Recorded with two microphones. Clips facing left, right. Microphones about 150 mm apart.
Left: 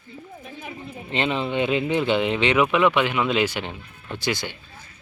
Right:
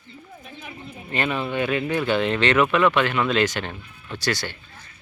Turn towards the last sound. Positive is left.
turn(degrees=15)  # may be behind; listen again after turning